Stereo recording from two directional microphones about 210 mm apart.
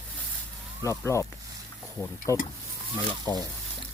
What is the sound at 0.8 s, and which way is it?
Speech, 15° left (ahead or behind).